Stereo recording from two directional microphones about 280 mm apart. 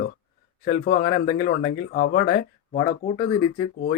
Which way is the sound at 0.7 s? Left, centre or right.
Left.